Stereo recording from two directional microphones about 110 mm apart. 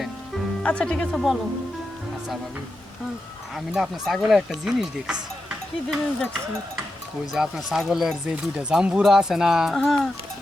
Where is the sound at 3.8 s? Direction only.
5° right (ahead or behind).